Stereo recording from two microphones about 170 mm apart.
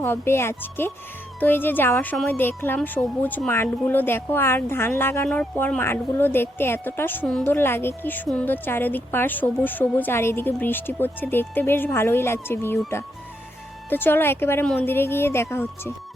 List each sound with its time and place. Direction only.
0.0 s speech: 15° left (ahead or behind)
13.9 s speech: 10° left (ahead or behind)